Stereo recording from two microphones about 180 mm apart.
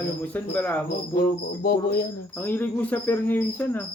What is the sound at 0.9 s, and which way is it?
Cricket, 55° left (ahead or behind).